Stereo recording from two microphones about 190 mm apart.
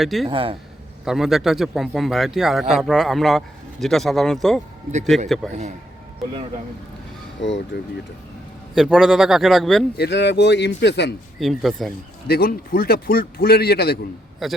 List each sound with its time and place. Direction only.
0.0 s speech: centre (ahead or behind)
0.3 s speech: 30° right (ahead or behind)
1.0 s speech: centre (ahead or behind)
7.7 s speech: 60° left (ahead or behind)
8.7 s speech: centre (ahead or behind)
10.0 s speech: 65° left (ahead or behind)
11.3 s speech: centre (ahead or behind)
12.3 s a man's voice: 50° left (ahead or behind)
14.4 s speech: centre (ahead or behind)